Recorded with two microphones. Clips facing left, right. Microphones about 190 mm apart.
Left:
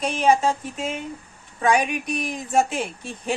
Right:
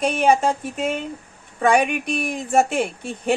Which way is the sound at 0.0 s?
55° right (ahead or behind).